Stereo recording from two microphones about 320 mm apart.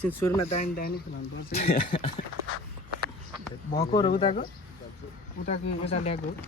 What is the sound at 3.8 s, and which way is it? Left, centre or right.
Speech, centre.